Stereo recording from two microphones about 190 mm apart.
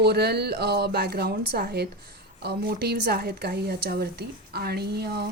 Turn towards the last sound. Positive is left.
turn(degrees=-60)  # may be behind; listen again after turning